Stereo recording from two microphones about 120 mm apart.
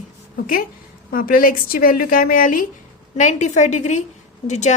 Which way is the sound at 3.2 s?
85° left.